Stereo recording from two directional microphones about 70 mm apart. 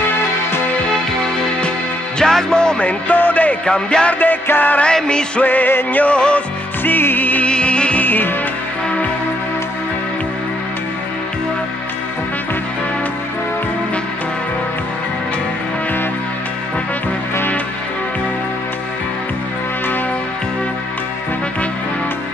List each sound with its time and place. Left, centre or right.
2.1 s music: centre
3.6 s music: centre
4.2 s music: left
4.8 s music: centre
5.5 s music: left
6.0 s music: centre
6.8 s music: left